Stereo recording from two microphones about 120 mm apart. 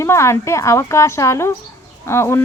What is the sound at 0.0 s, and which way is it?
Speech, 25° left (ahead or behind).